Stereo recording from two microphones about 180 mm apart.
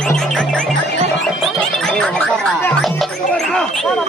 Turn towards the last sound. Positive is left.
turn(degrees=5)  # may be behind; listen again after turning